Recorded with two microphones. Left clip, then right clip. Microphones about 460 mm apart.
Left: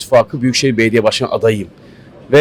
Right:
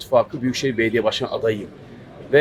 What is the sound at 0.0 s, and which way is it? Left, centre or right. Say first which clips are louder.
A man's voice: left 7 dB; left.